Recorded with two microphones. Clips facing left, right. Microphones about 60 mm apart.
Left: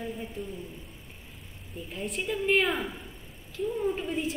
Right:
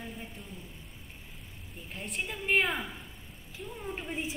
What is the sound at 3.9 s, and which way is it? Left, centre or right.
Speech, centre.